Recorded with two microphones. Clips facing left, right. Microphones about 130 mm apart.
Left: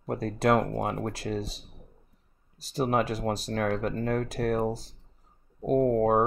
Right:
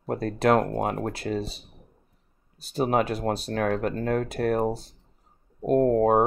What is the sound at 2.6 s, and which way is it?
Speech, 60° right (ahead or behind).